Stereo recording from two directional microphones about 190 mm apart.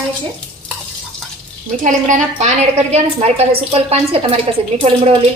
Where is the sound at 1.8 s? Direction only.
40° right (ahead or behind).